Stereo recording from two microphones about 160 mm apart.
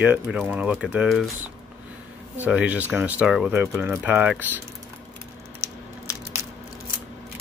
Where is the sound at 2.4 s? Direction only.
10° right (ahead or behind).